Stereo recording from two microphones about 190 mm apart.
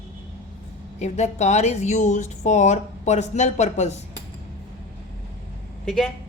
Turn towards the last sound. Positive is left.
turn(degrees=5)  # may be behind; listen again after turning